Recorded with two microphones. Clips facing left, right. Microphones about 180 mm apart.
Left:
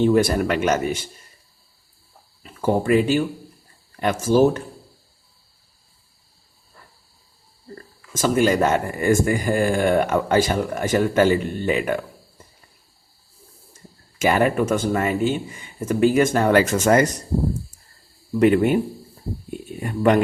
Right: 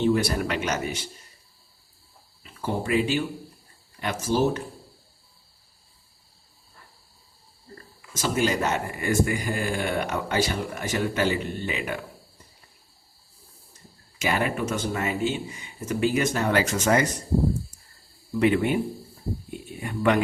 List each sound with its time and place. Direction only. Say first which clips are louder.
0.0 s speech: left 6 dB; 50° left (ahead or behind)
2.4 s speech: left 8 dB; 50° left (ahead or behind)
8.1 s speech: left 6 dB; 50° left (ahead or behind)
13.7 s speech: left 6 dB; 50° left (ahead or behind)
18.3 s speech: left 5 dB; 45° left (ahead or behind)
19.8 s speech: left 5 dB; 40° left (ahead or behind)